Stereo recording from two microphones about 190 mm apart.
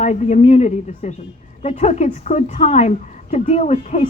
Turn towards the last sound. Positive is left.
turn(degrees=35)  # may be behind; listen again after turning